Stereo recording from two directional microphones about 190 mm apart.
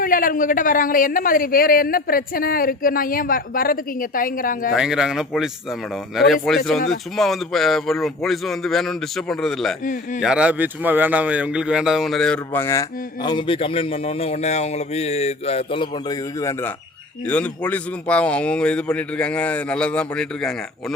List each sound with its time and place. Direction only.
0.0 s a man's voice: 45° left (ahead or behind)
4.7 s a man's voice: 5° right (ahead or behind)
9.8 s a man's voice: 45° left (ahead or behind)
10.2 s a man's voice: 5° right (ahead or behind)